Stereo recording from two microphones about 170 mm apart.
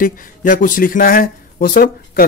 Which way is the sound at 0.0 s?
55° left (ahead or behind).